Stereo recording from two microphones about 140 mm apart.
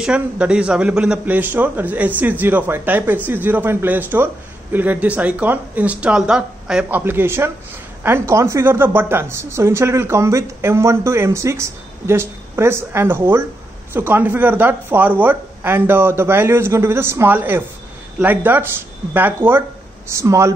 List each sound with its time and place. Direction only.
0.0 s a woman's voice: 5° right (ahead or behind)